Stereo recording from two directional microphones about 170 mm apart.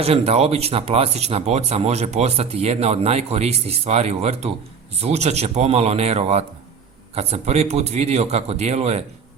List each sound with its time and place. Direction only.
0.0 s speech: 35° right (ahead or behind)